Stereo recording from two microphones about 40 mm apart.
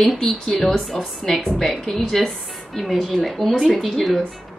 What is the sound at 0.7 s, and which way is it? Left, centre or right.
A woman's voice, centre.